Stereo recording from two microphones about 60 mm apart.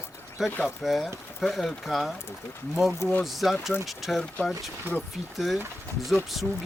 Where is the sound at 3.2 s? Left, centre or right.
Centre.